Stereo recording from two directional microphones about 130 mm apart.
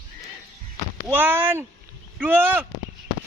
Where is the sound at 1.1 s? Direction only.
15° right (ahead or behind).